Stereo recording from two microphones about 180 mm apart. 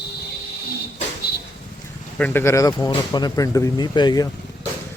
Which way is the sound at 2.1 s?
10° left (ahead or behind).